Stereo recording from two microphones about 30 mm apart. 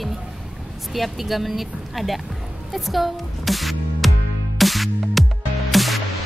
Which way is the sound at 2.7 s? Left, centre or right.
Centre.